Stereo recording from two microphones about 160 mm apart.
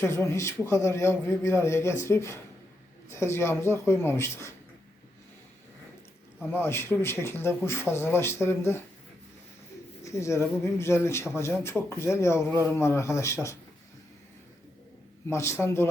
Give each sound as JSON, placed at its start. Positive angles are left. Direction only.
{"t": 0.0, "sound": "a man's voice", "side_deg": 15}
{"t": 6.5, "sound": "a man's voice", "side_deg": 15}
{"t": 10.0, "sound": "a man's voice", "side_deg": 20}
{"t": 15.3, "sound": "a man's voice", "side_deg": 15}